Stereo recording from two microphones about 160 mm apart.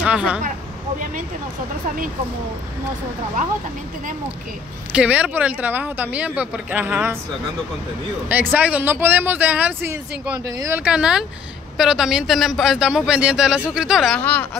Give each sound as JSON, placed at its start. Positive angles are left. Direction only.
{"t": 0.0, "sound": "speech", "side_deg": -5}
{"t": 4.9, "sound": "speech", "side_deg": -5}
{"t": 8.3, "sound": "speech", "side_deg": -10}
{"t": 10.8, "sound": "a man's voice", "side_deg": -5}
{"t": 14.1, "sound": "speech", "side_deg": 10}